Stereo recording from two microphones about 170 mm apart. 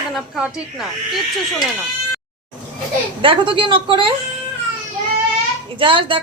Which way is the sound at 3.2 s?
30° right (ahead or behind).